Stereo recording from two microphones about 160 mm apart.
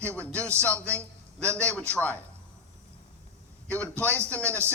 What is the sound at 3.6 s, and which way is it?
Speech, 10° left (ahead or behind).